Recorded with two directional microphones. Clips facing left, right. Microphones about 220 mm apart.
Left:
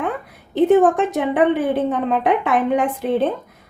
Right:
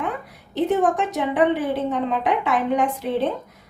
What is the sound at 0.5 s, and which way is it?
A woman's voice, 55° left (ahead or behind).